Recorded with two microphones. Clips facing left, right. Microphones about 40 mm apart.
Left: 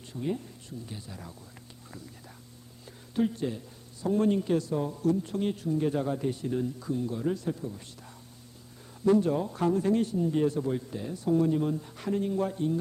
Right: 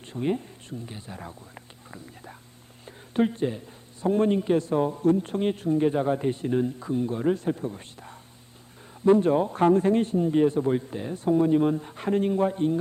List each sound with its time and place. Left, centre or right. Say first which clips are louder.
0.1 s a man's voice: right 5 dB; right
2.8 s a sound: right 4 dB; right
4.0 s a man's voice: right 4 dB; right